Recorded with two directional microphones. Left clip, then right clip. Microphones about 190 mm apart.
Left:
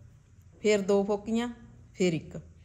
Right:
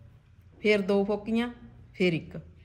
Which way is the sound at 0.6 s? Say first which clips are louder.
Even; 15° left (ahead or behind).